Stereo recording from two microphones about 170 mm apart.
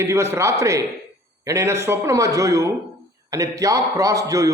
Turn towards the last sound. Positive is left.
turn(degrees=-20)  # may be behind; listen again after turning